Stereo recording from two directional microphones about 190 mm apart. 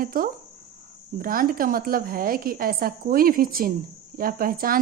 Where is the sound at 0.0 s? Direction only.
45° right (ahead or behind).